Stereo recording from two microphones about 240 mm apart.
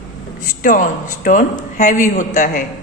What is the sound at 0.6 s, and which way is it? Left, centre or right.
A man's voice, left.